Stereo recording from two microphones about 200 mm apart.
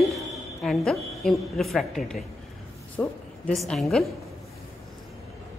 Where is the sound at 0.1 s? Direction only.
Centre (ahead or behind).